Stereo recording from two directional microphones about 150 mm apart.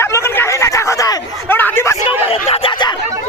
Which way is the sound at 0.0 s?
15° left (ahead or behind).